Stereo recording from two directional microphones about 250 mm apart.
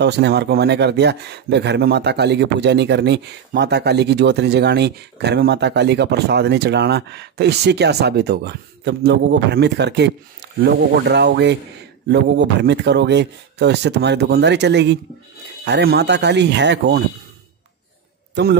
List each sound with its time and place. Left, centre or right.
0.0 s a man's voice: right
18.3 s a man's voice: right